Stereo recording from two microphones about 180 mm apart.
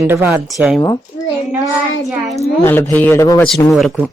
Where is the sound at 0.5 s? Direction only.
Centre (ahead or behind).